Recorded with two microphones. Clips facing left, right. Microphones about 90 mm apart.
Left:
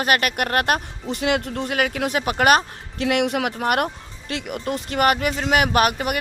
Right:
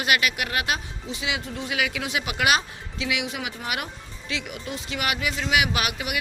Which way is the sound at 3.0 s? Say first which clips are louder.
Left 9 dB; 60° left (ahead or behind).